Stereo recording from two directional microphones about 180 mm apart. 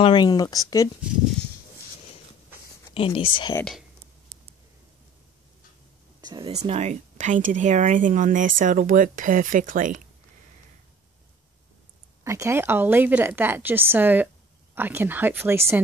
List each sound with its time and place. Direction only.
0.0 s speech: 25° left (ahead or behind)
2.9 s speech: 30° left (ahead or behind)
6.2 s speech: 25° right (ahead or behind)
6.5 s speech: 35° right (ahead or behind)
12.2 s a woman's voice: 15° right (ahead or behind)